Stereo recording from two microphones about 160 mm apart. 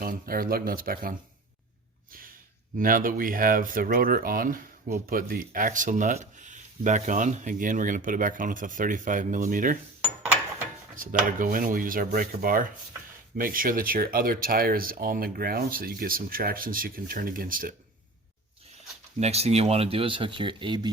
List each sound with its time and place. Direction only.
0.0 s speech: 65° right (ahead or behind)
2.7 s speech: 60° right (ahead or behind)
10.0 s mechanisms: 10° right (ahead or behind)
10.9 s speech: 55° right (ahead or behind)
19.2 s speech: 40° right (ahead or behind)